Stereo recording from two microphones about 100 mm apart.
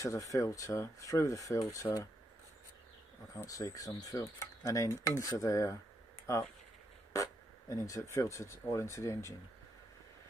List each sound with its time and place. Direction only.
0.0 s stir: 35° left (ahead or behind)
3.4 s stir: 35° left (ahead or behind)
7.1 s stir: 30° left (ahead or behind)